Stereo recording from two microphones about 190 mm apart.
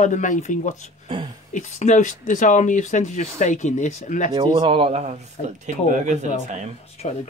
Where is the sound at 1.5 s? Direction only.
40° left (ahead or behind).